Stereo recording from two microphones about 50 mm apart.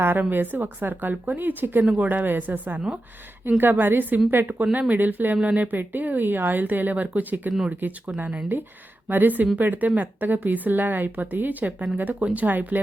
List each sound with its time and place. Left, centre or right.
0.0 s speech: right
1.1 s speech: right
1.4 s a woman's voice: right
1.8 s a woman's voice: right
4.5 s speech: right